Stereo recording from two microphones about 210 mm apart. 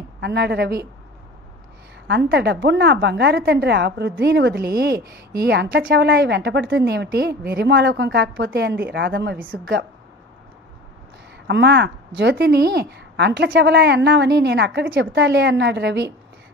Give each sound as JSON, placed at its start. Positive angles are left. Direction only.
{"t": 0.2, "sound": "a woman's voice", "side_deg": -50}
{"t": 2.0, "sound": "a woman's voice", "side_deg": -55}
{"t": 11.4, "sound": "a woman's voice", "side_deg": -55}